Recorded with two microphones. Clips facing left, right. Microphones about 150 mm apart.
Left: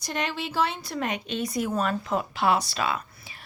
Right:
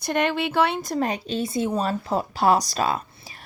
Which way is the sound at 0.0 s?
55° right (ahead or behind).